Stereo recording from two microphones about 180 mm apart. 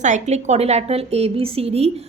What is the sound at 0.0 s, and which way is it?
A woman's voice, 40° right (ahead or behind).